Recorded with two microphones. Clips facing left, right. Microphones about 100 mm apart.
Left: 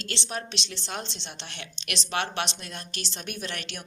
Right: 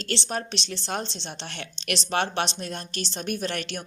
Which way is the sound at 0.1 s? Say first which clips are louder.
Right 5 dB; 40° right (ahead or behind).